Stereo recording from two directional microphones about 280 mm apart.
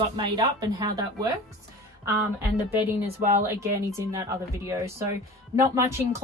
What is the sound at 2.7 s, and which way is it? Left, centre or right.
Speech, centre.